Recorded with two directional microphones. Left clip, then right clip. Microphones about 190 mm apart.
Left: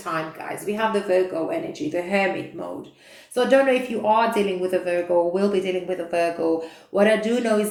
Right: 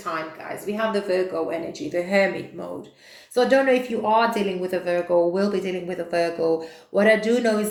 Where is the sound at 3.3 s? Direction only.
30° right (ahead or behind).